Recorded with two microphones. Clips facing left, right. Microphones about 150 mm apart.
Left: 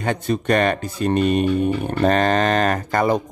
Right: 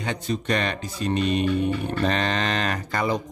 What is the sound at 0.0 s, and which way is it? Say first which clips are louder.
Speech: left 6 dB; 55° left (ahead or behind).